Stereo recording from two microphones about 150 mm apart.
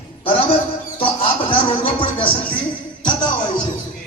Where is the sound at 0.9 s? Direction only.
35° left (ahead or behind).